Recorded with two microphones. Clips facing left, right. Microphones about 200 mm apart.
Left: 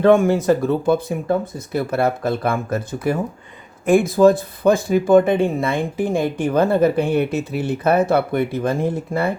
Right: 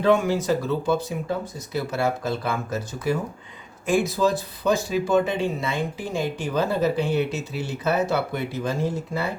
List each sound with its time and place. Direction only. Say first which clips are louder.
0.0 s speech: left 6 dB; 50° left (ahead or behind)